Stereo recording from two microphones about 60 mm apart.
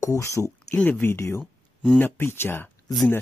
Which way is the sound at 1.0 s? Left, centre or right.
Left.